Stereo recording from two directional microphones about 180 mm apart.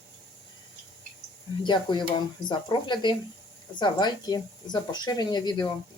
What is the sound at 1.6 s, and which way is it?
Speech, 25° left (ahead or behind).